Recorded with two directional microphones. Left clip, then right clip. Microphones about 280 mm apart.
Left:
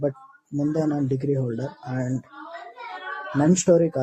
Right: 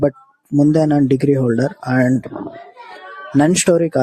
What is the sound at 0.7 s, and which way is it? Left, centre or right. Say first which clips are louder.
Speech: right 7 dB; right.